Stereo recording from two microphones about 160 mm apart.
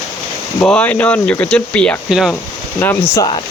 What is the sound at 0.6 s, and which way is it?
Speech, 10° left (ahead or behind).